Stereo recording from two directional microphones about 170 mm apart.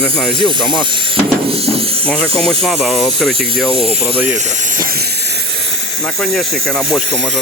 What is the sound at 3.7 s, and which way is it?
Speech, 35° right (ahead or behind).